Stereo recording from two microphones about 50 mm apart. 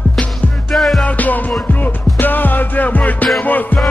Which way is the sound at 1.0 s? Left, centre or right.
Left.